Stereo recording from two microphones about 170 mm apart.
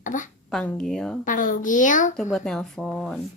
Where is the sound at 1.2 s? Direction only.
50° left (ahead or behind).